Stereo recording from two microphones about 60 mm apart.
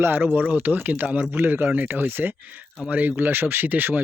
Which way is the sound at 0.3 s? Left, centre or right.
Right.